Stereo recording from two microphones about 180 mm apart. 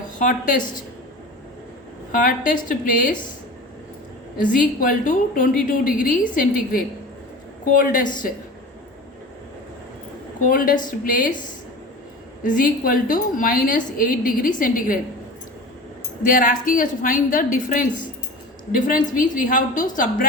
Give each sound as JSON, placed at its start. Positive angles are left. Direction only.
{"t": 0.2, "sound": "a woman's voice", "side_deg": 45}
{"t": 2.2, "sound": "a woman's voice", "side_deg": 50}
{"t": 4.4, "sound": "a woman's voice", "side_deg": 50}
{"t": 10.4, "sound": "a woman's voice", "side_deg": 50}
{"t": 12.4, "sound": "a woman's voice", "side_deg": 50}
{"t": 16.2, "sound": "a woman's voice", "side_deg": 50}